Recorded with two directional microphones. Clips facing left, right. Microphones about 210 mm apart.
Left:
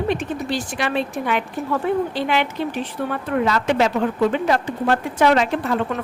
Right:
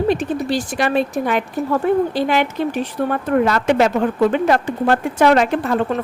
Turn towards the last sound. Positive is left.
turn(degrees=-50)  # may be behind; listen again after turning